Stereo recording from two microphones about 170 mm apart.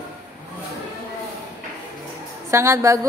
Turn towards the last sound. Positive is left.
turn(degrees=-15)  # may be behind; listen again after turning